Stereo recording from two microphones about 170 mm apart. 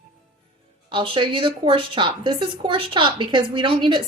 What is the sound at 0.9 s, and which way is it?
A woman's voice, 30° right (ahead or behind).